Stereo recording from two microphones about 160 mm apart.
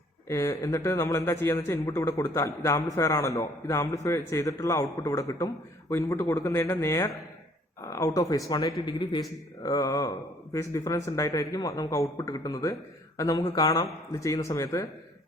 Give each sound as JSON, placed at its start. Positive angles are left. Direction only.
{"t": 0.3, "sound": "a man's voice", "side_deg": 20}